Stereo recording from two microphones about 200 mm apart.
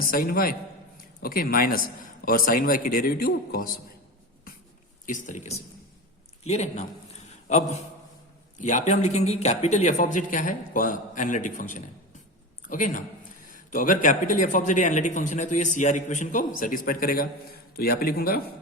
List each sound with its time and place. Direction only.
0.1 s a man's voice: 45° left (ahead or behind)
5.0 s a man's voice: 40° left (ahead or behind)
7.3 s a sound: 35° left (ahead or behind)
8.5 s speech: 35° left (ahead or behind)
12.6 s speech: 40° left (ahead or behind)